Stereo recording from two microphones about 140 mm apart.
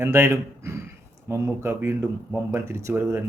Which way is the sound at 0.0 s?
20° right (ahead or behind).